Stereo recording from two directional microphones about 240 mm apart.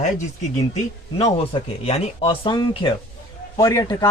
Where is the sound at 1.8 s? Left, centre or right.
Left.